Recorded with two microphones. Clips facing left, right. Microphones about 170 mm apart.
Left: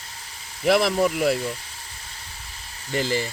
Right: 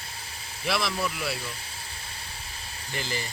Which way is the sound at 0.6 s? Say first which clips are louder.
Left 10 dB; 50° left (ahead or behind).